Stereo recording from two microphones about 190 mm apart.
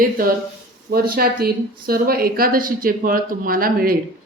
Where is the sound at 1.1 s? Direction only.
50° right (ahead or behind).